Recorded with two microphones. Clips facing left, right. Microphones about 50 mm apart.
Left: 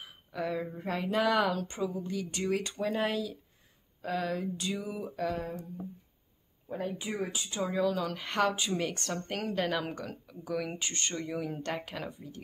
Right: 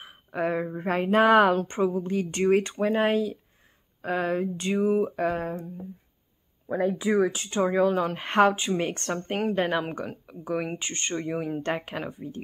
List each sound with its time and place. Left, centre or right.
0.0 s a woman's voice: right
7.2 s speech: right
7.4 s a woman's voice: right